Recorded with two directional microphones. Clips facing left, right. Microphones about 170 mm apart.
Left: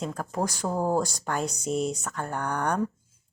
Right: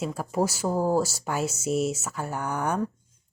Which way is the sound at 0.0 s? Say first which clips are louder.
Right 3 dB; 10° right (ahead or behind).